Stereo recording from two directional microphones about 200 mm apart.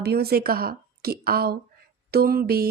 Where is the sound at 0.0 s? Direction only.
55° right (ahead or behind).